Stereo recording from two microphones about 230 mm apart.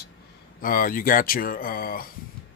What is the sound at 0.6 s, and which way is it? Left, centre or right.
Speech, left.